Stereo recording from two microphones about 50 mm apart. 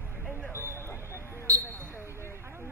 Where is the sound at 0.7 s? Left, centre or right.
Left.